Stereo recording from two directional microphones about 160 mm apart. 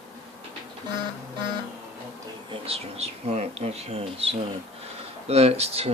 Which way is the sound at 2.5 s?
40° right (ahead or behind).